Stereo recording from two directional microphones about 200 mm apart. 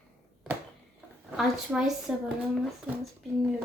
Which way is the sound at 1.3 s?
5° right (ahead or behind).